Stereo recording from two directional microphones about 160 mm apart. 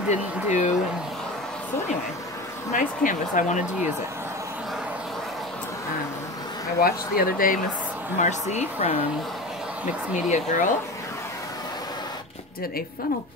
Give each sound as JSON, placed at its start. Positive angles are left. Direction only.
{"t": 0.1, "sound": "speech", "side_deg": 45}
{"t": 2.7, "sound": "speech", "side_deg": 55}
{"t": 6.8, "sound": "speech", "side_deg": 65}
{"t": 8.2, "sound": "speech", "side_deg": 45}
{"t": 10.3, "sound": "speech", "side_deg": 55}